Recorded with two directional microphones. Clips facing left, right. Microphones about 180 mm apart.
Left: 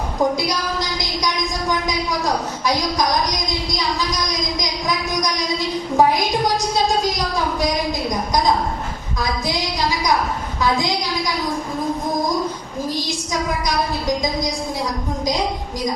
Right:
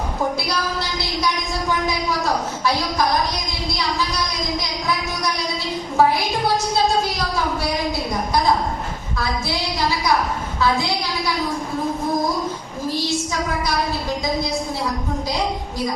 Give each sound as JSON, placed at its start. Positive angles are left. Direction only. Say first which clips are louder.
{"t": 0.2, "sound": "a woman's voice", "louder": "left 4 dB", "side_deg": 15}
{"t": 6.0, "sound": "a sound", "louder": "left 1 dB", "side_deg": 15}
{"t": 10.6, "sound": "a woman's voice", "louder": "even", "side_deg": 15}
{"t": 13.7, "sound": "a woman's voice", "louder": "left 2 dB", "side_deg": 15}